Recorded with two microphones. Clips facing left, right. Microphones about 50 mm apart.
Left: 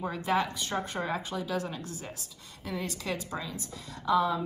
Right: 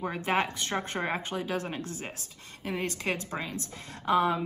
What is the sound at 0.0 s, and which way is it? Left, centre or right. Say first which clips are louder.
A woman's voice: even; right.